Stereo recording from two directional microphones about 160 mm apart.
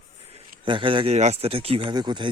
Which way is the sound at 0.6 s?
30° right (ahead or behind).